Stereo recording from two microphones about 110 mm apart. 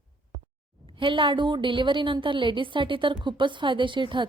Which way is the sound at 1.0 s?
50° right (ahead or behind).